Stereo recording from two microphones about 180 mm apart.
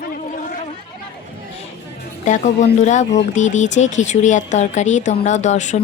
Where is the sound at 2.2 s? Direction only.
45° left (ahead or behind).